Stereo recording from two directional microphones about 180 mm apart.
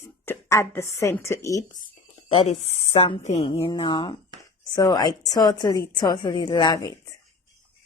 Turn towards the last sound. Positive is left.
turn(degrees=20)  # may be behind; listen again after turning